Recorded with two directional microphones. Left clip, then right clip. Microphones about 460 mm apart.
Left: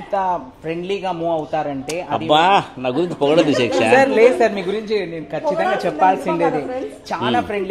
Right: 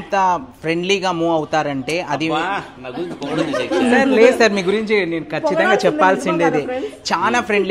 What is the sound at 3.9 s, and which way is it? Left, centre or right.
A woman's voice, right.